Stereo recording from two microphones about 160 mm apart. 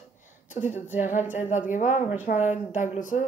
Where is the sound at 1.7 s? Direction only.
50° left (ahead or behind).